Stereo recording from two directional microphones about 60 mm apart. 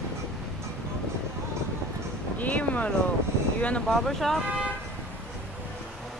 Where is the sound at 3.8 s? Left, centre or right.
Centre.